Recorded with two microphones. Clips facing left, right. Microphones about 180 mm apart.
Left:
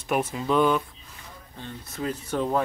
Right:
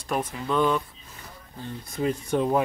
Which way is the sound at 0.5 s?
Centre (ahead or behind).